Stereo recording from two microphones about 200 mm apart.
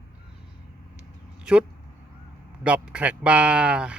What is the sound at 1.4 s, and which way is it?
A man's voice, 5° right (ahead or behind).